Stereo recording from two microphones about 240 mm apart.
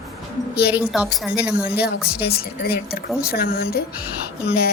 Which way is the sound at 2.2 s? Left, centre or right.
Left.